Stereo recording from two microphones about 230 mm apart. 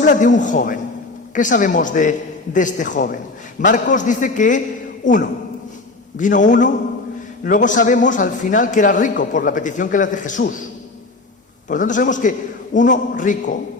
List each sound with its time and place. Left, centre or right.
0.0 s a man's voice: left
11.7 s a man's voice: left